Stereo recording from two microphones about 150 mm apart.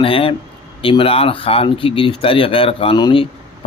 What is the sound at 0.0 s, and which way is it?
A man's voice, 35° left (ahead or behind).